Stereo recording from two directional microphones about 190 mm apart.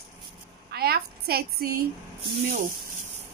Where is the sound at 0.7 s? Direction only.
55° right (ahead or behind).